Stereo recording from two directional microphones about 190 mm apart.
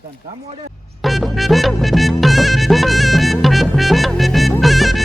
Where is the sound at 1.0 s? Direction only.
Centre (ahead or behind).